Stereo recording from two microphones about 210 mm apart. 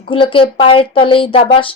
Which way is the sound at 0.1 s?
25° left (ahead or behind).